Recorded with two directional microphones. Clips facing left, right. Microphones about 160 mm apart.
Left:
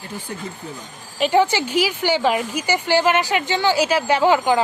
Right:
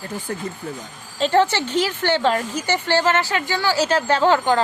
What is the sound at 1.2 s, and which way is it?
A woman's voice, 10° left (ahead or behind).